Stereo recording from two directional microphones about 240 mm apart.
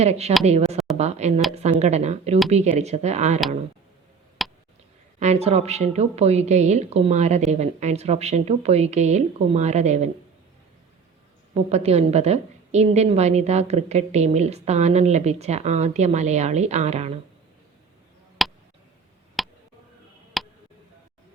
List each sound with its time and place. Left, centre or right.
0.0 s a woman's voice: right
4.4 s a sound: centre
5.2 s a woman's voice: right
11.5 s a woman's voice: right
18.4 s a sound: centre
20.4 s tick: centre